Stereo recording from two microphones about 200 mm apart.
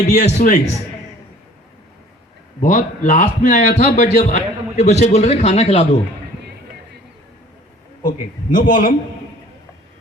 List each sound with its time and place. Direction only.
0.2 s a man's voice: 35° left (ahead or behind)
2.6 s a man's voice: 40° left (ahead or behind)
8.0 s a man's voice: 40° left (ahead or behind)